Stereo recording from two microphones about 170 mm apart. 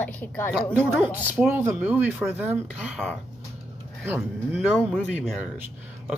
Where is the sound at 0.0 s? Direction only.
10° left (ahead or behind).